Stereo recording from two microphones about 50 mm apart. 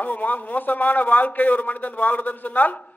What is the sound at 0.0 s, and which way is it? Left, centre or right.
A man's voice, left.